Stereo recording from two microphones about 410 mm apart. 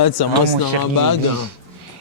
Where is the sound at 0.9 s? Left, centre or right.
Left.